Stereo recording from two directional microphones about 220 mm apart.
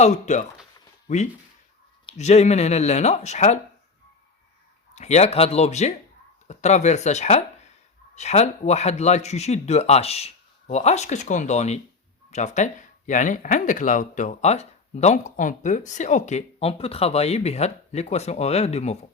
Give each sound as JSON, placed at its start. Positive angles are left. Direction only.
{"t": 0.0, "sound": "speech", "side_deg": 30}
{"t": 4.9, "sound": "speech", "side_deg": 30}